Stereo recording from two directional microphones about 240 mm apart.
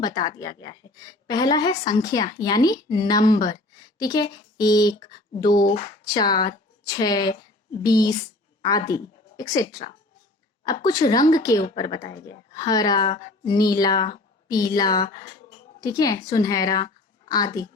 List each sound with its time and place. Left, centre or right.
0.0 s a woman's voice: centre
5.6 s speech: left
6.1 s a woman's voice: centre